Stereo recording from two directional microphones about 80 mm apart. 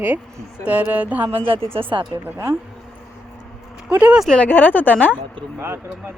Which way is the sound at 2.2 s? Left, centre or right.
Right.